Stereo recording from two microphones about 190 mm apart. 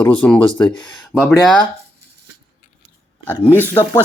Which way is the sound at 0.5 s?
25° left (ahead or behind).